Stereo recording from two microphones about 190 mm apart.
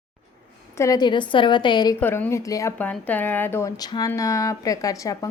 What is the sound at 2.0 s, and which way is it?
Speech, 10° left (ahead or behind).